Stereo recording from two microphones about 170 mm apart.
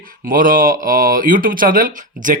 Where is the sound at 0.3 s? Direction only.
55° right (ahead or behind).